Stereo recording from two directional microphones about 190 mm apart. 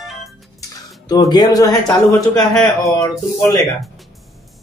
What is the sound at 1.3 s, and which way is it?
Speech, 20° left (ahead or behind).